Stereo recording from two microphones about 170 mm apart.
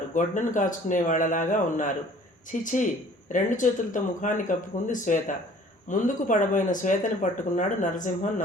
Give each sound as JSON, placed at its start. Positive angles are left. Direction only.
{"t": 0.1, "sound": "speech", "side_deg": 50}